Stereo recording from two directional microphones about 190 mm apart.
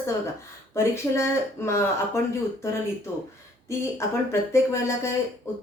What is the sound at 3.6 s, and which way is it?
Speech, 15° left (ahead or behind).